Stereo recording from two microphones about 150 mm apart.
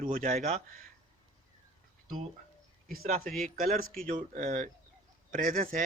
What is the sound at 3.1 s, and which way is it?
A man's voice, 75° right (ahead or behind).